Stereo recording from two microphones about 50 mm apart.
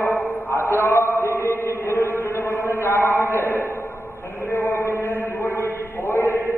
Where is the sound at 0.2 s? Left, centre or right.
Left.